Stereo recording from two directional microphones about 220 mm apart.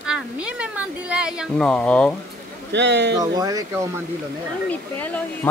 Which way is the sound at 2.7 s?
55° right (ahead or behind).